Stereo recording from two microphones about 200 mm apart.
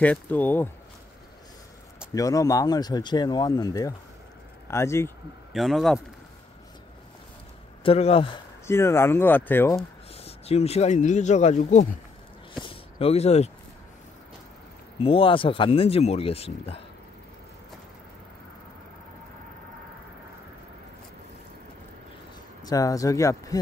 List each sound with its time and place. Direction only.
0.0 s speech: 10° left (ahead or behind)
2.1 s speech: 15° left (ahead or behind)
5.5 s speech: centre (ahead or behind)
7.8 s speech: 30° left (ahead or behind)
8.6 s speech: 15° left (ahead or behind)
10.1 s speech: 30° left (ahead or behind)
12.5 s a sound: 30° left (ahead or behind)
15.0 s speech: 30° left (ahead or behind)
22.6 s speech: 20° left (ahead or behind)